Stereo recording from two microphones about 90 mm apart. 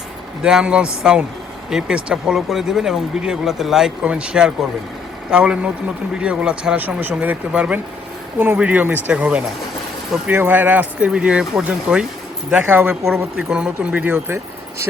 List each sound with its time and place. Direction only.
0.4 s speech: 10° right (ahead or behind)
12.6 s speech: 25° right (ahead or behind)
13.3 s speech: 10° right (ahead or behind)